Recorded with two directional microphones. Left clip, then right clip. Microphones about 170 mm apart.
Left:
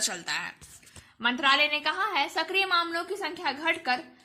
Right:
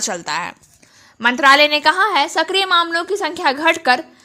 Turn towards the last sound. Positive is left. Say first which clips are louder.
# right 13 dB
turn(degrees=-50)  # may be behind; listen again after turning